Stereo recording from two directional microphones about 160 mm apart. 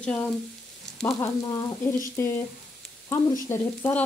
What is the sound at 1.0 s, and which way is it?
Frying, 20° left (ahead or behind).